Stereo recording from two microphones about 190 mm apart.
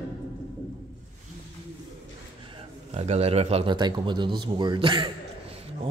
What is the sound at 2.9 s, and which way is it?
Speech, 35° right (ahead or behind).